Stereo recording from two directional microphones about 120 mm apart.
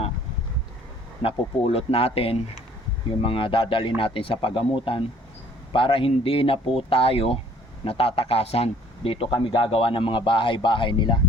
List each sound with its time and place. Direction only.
1.2 s a man's voice: 50° left (ahead or behind)